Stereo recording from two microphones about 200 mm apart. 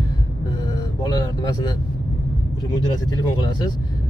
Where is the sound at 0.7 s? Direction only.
20° left (ahead or behind).